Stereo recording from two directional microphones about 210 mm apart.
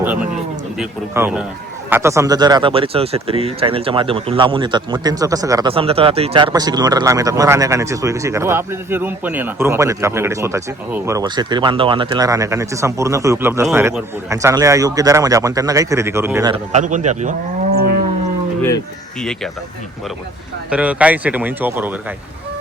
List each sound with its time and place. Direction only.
0.0 s a sound: 10° right (ahead or behind)
0.8 s a man's voice: 5° right (ahead or behind)
16.7 s a man's voice: 35° right (ahead or behind)
19.2 s a man's voice: 5° left (ahead or behind)
20.7 s speech: 5° right (ahead or behind)